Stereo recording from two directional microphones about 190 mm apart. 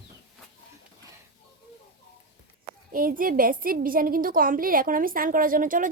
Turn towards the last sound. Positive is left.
turn(degrees=-45)  # may be behind; listen again after turning